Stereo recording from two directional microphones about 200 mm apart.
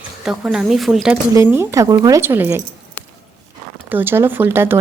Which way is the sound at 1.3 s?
10° right (ahead or behind).